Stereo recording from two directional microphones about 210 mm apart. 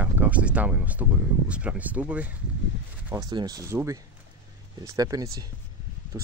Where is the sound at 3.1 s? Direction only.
20° right (ahead or behind).